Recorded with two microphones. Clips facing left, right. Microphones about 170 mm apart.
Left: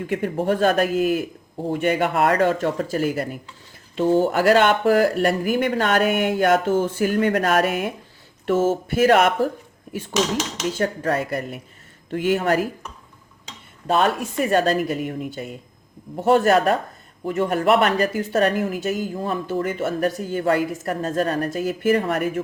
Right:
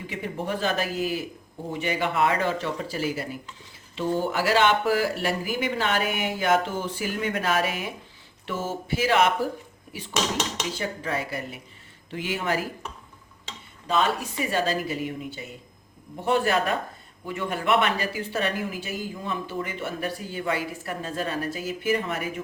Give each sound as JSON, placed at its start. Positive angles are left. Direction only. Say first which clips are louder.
{"t": 0.1, "sound": "speech", "louder": "left 8 dB", "side_deg": 50}
{"t": 13.8, "sound": "speech", "louder": "left 5 dB", "side_deg": 50}